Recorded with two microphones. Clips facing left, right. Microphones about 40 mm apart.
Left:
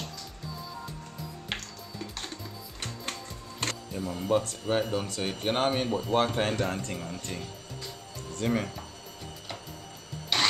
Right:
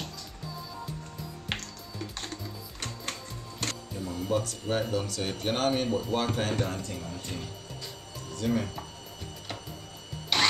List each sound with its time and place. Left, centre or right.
1.5 s music: centre
3.6 s speech: left
4.6 s speech: centre
6.1 s speech: left
10.3 s engine starting: centre